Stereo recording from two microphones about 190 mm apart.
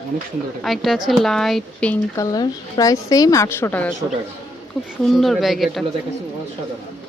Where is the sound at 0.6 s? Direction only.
Centre (ahead or behind).